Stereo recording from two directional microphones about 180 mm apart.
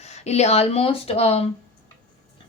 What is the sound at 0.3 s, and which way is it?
A woman's voice, 35° left (ahead or behind).